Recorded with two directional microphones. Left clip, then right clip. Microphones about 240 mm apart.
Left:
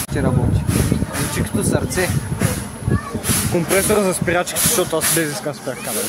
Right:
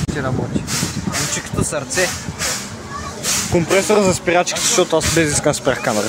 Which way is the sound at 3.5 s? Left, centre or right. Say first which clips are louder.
Right 2 dB; centre.